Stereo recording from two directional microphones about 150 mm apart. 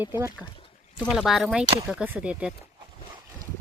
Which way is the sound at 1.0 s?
Centre (ahead or behind).